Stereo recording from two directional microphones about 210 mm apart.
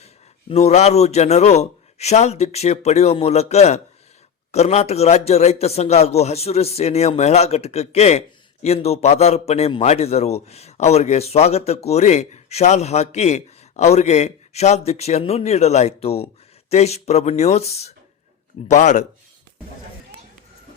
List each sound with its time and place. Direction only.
0.0 s a man's voice: 30° left (ahead or behind)